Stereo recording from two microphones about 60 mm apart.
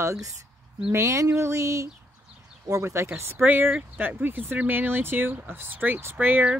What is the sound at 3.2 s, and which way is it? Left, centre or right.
Speech, right.